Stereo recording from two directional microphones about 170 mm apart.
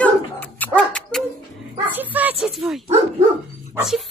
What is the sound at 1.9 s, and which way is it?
Speech, 10° right (ahead or behind).